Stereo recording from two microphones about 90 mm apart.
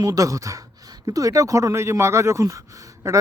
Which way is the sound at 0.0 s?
40° right (ahead or behind).